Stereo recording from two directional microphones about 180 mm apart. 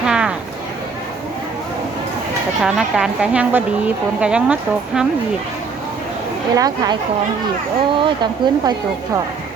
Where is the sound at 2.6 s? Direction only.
5° right (ahead or behind).